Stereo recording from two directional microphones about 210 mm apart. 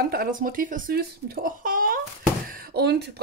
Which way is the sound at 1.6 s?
40° right (ahead or behind).